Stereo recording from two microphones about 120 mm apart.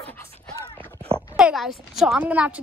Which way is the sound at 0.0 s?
20° left (ahead or behind).